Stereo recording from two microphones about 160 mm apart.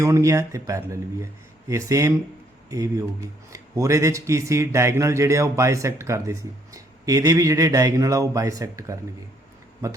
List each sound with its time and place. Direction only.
0.0 s a man's voice: 20° right (ahead or behind)